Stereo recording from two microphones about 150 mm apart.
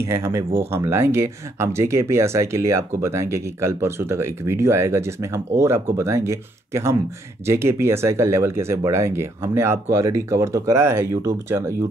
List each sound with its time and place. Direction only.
0.0 s speech: 20° right (ahead or behind)